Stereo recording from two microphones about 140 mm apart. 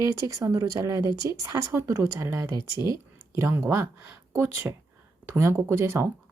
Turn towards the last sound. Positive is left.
turn(degrees=-15)  # may be behind; listen again after turning